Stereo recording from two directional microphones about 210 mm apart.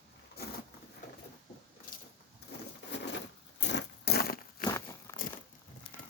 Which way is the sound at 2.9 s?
55° left (ahead or behind).